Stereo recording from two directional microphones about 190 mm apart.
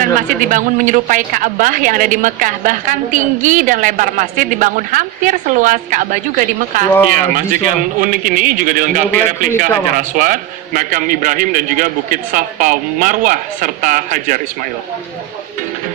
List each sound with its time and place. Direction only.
0.3 s a woman's voice: 45° right (ahead or behind)